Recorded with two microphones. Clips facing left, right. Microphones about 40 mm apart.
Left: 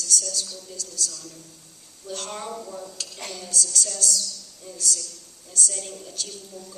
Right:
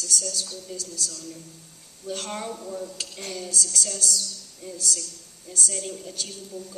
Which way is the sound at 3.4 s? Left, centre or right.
Right.